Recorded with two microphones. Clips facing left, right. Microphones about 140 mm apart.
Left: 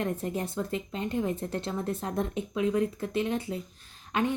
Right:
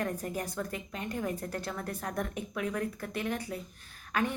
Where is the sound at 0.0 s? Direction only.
25° left (ahead or behind).